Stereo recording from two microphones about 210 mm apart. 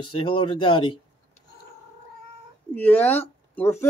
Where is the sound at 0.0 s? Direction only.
25° left (ahead or behind).